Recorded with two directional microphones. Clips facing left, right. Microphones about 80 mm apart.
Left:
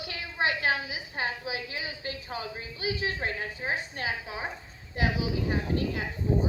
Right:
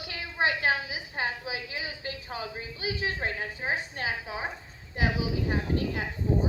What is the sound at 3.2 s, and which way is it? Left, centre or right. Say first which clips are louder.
A woman's voice: even; centre.